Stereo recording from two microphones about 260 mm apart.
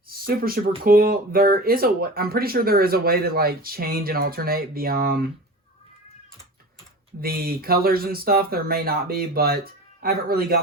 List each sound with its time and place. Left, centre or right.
0.3 s speech: right
7.2 s speech: right